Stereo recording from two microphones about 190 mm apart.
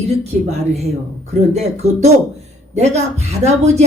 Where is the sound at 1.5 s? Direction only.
35° right (ahead or behind).